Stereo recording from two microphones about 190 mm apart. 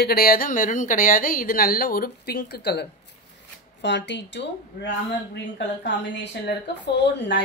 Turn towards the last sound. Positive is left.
turn(degrees=65)  # may be behind; listen again after turning